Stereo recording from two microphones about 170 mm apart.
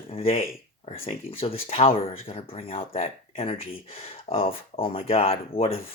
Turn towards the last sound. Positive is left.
turn(degrees=35)  # may be behind; listen again after turning